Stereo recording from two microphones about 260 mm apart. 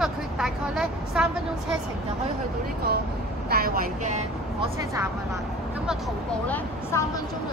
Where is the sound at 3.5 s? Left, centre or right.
Right.